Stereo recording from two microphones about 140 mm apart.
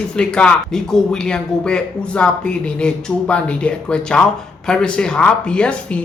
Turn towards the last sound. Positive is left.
turn(degrees=5)  # may be behind; listen again after turning